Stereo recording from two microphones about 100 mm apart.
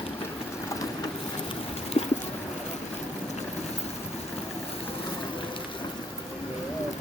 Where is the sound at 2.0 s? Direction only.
80° left.